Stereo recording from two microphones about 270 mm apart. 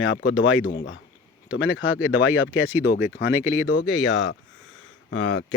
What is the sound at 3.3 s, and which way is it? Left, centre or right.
Speech, centre.